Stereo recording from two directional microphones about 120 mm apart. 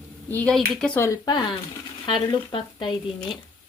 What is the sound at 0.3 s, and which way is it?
Speech, 15° left (ahead or behind).